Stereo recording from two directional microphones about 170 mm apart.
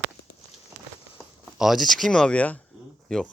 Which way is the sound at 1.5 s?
Centre (ahead or behind).